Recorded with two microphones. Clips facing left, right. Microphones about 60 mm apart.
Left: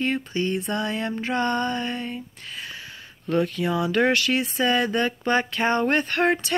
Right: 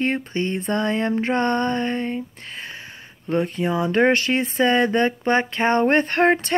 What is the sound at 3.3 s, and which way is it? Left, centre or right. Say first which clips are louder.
Speech: right 1 dB; right.